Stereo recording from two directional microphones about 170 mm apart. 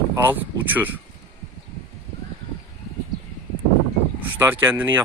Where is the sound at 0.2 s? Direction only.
10° right (ahead or behind).